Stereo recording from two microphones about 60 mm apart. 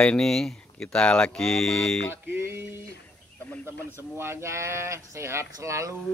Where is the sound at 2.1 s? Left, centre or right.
Right.